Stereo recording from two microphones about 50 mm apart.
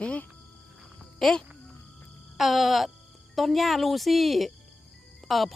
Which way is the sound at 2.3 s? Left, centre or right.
Centre.